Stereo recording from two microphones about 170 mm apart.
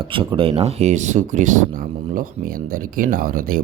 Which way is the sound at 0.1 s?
30° right (ahead or behind).